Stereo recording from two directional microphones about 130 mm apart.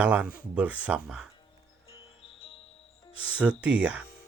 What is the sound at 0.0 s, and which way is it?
Speech, 10° right (ahead or behind).